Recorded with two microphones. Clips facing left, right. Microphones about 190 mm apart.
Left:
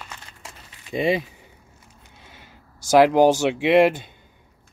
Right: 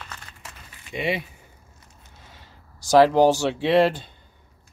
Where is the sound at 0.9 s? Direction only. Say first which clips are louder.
Left 6 dB; 25° left (ahead or behind).